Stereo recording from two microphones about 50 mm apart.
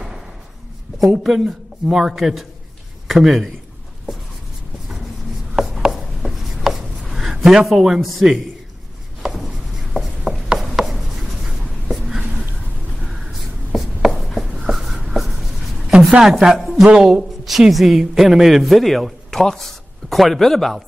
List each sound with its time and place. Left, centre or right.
1.2 s a man's voice: centre
5.6 s chopping: centre
6.2 s writing: centre
7.4 s a man's voice: centre
9.2 s a sound: centre
9.9 s writing: centre
11.9 s whispering: centre
13.0 s a sound: centre
13.7 s writing: centre
16.2 s a man's voice: centre